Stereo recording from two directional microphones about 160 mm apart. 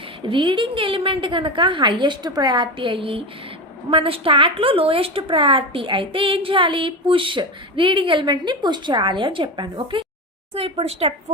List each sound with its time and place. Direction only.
0.3 s a woman's voice: 30° right (ahead or behind)